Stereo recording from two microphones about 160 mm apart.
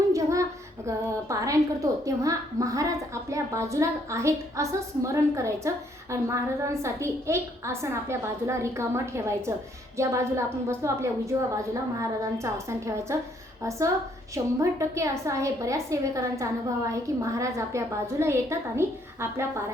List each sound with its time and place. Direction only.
0.1 s child singing: 20° right (ahead or behind)
0.9 s a woman's voice: 20° right (ahead or behind)